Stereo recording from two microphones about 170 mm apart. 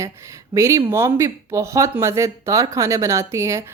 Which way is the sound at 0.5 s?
20° right (ahead or behind).